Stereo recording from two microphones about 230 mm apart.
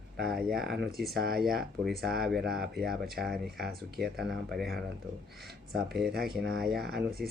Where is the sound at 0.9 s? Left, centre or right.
Right.